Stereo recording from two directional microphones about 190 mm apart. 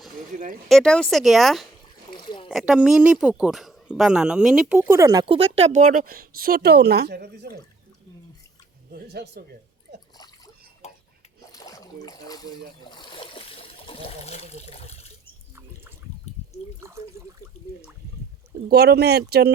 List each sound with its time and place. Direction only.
0.7 s speech: 5° left (ahead or behind)
2.1 s a sound: 25° left (ahead or behind)
2.5 s speech: centre (ahead or behind)
5.2 s speech: 30° right (ahead or behind); by 7.6 s 55° right (ahead or behind)
8.9 s a woman's voice: 55° right (ahead or behind)
10.8 s a sound: 35° left (ahead or behind)
11.5 s a sound: 20° left (ahead or behind); by 15.1 s 35° left (ahead or behind)
16.8 s water: 15° right (ahead or behind)
18.7 s speech: 60° right (ahead or behind)